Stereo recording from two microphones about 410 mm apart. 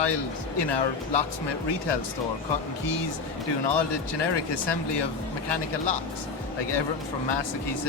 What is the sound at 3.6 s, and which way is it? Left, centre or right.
Speech, left.